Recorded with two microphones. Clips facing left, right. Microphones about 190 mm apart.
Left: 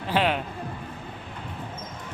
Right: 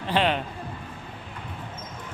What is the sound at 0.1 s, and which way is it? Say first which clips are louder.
Speech: even; 5° left (ahead or behind).